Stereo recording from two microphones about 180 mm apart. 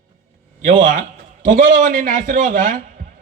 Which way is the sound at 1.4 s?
45° right (ahead or behind).